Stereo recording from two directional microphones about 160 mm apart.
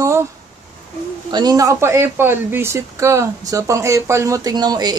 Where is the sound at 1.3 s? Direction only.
25° right (ahead or behind).